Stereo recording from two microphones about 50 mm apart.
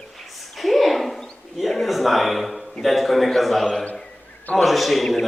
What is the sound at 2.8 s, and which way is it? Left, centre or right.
A man's voice, centre.